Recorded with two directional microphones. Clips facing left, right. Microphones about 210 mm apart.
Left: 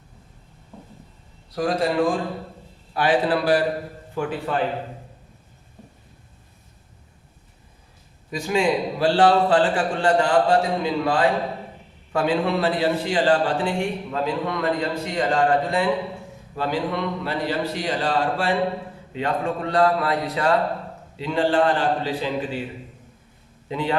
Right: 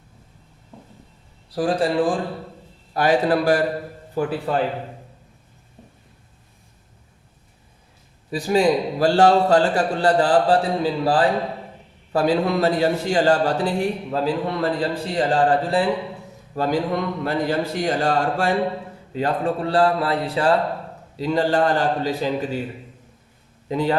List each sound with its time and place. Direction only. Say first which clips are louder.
1.5 s a man's voice: right 1 dB; 30° right (ahead or behind)
2.9 s a man's voice: right 2 dB; 45° right (ahead or behind)
8.3 s a man's voice: right 3 dB; 35° right (ahead or behind)
16.6 s a man's voice: right 3 dB; 45° right (ahead or behind)
23.6 s a man's voice: right 4 dB; 40° right (ahead or behind)